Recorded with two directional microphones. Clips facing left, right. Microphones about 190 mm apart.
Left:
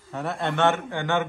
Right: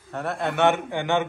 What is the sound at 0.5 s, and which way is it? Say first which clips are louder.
Speech: right 2 dB; 15° right (ahead or behind).